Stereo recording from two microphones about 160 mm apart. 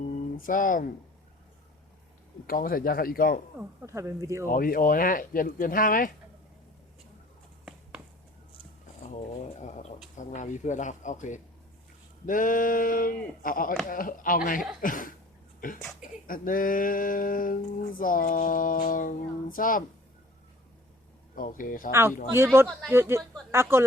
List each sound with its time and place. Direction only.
0.4 s speech: 55° left (ahead or behind)
2.5 s speech: 65° left (ahead or behind)
3.6 s speech: 15° right (ahead or behind)
4.4 s speech: 65° left (ahead or behind)
9.0 s a sound: 45° left (ahead or behind)
10.2 s speech: 50° left (ahead or behind)
15.8 s speech: centre (ahead or behind)
16.2 s speech: 60° left (ahead or behind)
21.3 s speech: 55° left (ahead or behind)
22.4 s speech: 15° right (ahead or behind)